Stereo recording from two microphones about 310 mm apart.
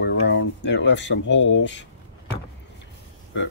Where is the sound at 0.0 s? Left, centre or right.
Left.